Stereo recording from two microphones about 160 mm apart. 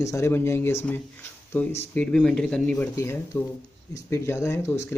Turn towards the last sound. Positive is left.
turn(degrees=15)  # may be behind; listen again after turning